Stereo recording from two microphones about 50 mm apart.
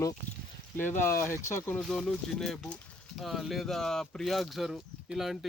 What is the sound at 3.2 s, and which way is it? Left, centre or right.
Speech, centre.